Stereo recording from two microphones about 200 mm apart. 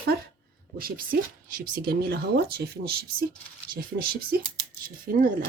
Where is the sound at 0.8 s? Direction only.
45° right (ahead or behind).